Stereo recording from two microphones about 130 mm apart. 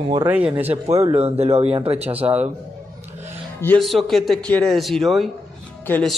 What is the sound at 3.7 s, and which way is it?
Speech, centre (ahead or behind).